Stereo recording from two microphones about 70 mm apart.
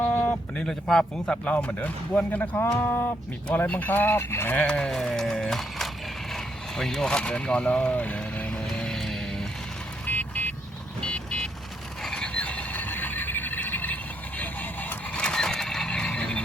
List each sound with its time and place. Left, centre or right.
0.0 s a sound: left
0.6 s a man's voice: centre
1.5 s speech: left
4.5 s a man's voice: centre
4.9 s music: centre
6.3 s speech: centre
8.6 s music: centre
10.1 s vehicle: left
12.0 s mechanisms: centre; by 15.2 s left
15.2 s mechanisms: centre